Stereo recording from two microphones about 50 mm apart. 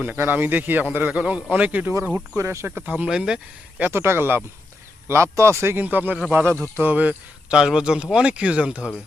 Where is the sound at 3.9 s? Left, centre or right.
Right.